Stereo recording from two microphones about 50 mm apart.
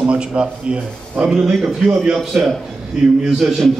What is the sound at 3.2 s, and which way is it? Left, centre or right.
Speech, centre.